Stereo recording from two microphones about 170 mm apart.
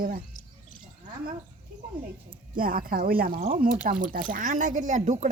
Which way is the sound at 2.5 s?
55° right (ahead or behind).